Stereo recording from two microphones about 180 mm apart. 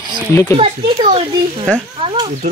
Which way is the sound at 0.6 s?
30° right (ahead or behind).